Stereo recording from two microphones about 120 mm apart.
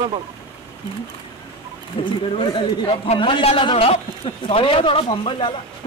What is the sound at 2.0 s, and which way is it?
A man's voice, 45° left (ahead or behind).